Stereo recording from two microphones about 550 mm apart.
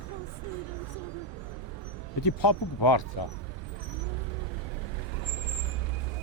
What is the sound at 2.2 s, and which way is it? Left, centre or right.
Speech, left.